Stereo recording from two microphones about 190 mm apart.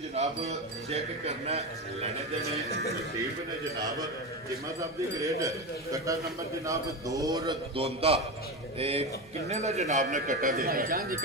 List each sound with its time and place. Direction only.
0.1 s speech: 35° right (ahead or behind)
5.2 s a man's voice: 15° right (ahead or behind)
7.7 s speech: 30° right (ahead or behind); by 11.1 s 50° right (ahead or behind)